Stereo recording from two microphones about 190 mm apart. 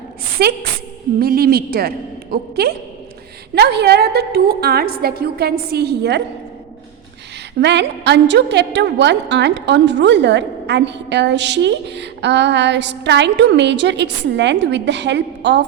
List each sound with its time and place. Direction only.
0.4 s a woman's voice: 55° right (ahead or behind)
7.6 s a woman's voice: 65° right (ahead or behind)